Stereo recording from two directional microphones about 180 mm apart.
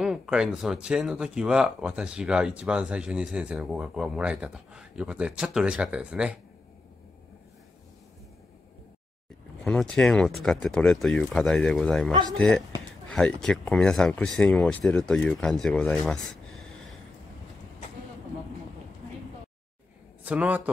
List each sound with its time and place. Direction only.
0.0 s speech: 5° right (ahead or behind)
9.7 s speech: 5° left (ahead or behind)
12.1 s speech: 25° right (ahead or behind)
12.4 s speech: 5° left (ahead or behind)
20.2 s a man's voice: 10° right (ahead or behind)